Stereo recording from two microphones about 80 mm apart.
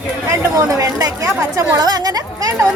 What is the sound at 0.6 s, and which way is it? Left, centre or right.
A woman's voice, right.